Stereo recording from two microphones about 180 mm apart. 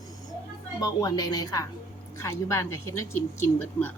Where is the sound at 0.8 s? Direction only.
20° left (ahead or behind).